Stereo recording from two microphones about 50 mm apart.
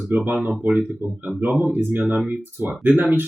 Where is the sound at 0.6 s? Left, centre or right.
Right.